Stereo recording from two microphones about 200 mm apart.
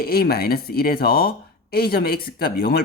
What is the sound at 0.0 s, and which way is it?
Speech, 50° left (ahead or behind).